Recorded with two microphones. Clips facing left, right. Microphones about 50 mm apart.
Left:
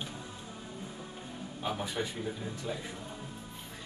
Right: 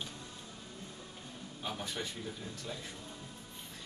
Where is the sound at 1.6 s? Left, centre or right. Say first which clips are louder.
Left 5 dB; centre.